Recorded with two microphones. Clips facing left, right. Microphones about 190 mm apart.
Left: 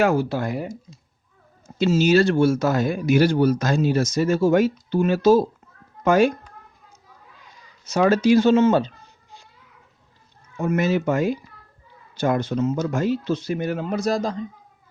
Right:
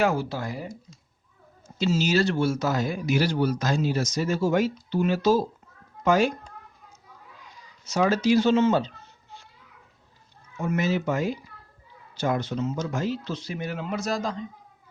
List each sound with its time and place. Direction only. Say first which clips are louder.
0.0 s speech: left 5 dB; 60° left (ahead or behind)
1.8 s speech: left 6 dB; 55° left (ahead or behind)
7.9 s speech: left 5 dB; 55° left (ahead or behind)
10.6 s speech: left 4 dB; 50° left (ahead or behind); by 14.3 s 35° left (ahead or behind)